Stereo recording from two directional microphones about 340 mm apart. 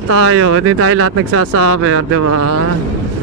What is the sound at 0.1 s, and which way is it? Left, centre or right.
Speech, right.